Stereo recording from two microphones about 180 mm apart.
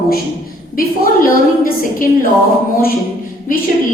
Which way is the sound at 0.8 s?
50° left (ahead or behind).